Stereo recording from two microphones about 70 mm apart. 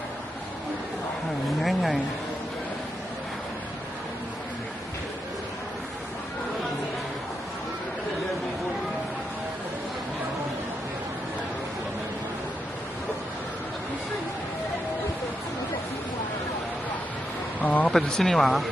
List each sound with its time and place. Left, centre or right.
1.6 s speech: centre
17.6 s a sound: left
17.9 s speech: centre